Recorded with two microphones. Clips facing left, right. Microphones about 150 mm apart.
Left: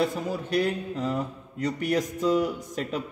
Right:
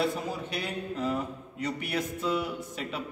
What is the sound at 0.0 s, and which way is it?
A man's voice, 40° left (ahead or behind).